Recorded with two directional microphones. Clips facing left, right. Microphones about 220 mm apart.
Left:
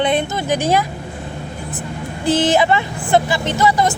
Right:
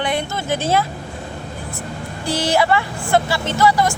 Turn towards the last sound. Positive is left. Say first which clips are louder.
# even
turn(degrees=20)  # may be behind; listen again after turning